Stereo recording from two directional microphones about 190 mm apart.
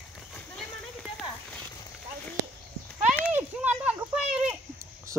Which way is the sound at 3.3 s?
10° right (ahead or behind).